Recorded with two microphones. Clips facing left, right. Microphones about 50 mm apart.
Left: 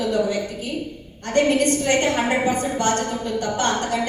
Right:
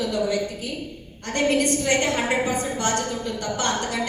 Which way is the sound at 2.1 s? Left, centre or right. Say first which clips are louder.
Left 2 dB; left.